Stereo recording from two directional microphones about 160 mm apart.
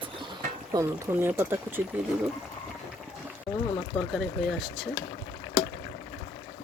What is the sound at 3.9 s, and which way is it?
Speech, centre (ahead or behind).